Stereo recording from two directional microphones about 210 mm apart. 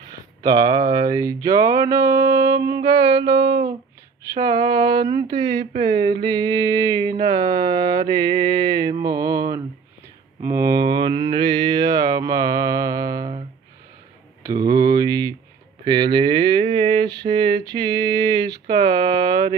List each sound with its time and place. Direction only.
0.4 s music: 20° right (ahead or behind)
4.3 s mantra: 20° right (ahead or behind)
14.4 s a sound: 15° right (ahead or behind)